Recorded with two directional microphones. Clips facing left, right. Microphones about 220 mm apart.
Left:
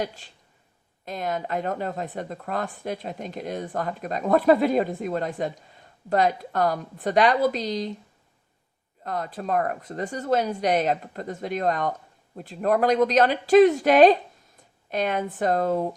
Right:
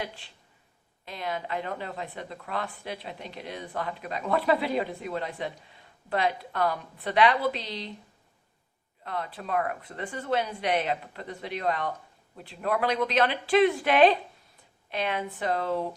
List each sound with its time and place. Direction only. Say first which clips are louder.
0.0 s speech: left 6 dB; 45° left (ahead or behind)
9.0 s speech: left 5 dB; 45° left (ahead or behind)